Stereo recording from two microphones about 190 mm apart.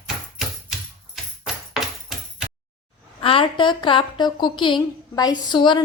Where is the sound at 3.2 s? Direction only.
30° left (ahead or behind).